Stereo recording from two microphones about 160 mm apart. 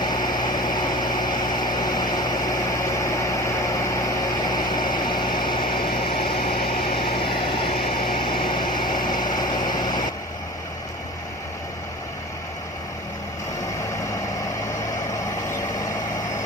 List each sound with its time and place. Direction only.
0.0 s vehicle: 25° left (ahead or behind)
6.0 s a sound: 35° left (ahead or behind)
7.1 s vehicle: 30° left (ahead or behind)